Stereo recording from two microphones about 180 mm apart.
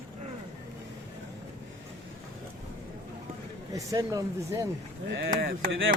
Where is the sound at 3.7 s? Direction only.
20° right (ahead or behind).